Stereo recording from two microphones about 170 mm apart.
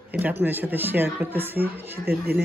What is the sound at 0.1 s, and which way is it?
Speech, 10° right (ahead or behind).